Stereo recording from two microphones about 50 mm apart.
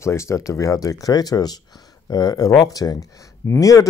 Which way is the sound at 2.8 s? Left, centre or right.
Left.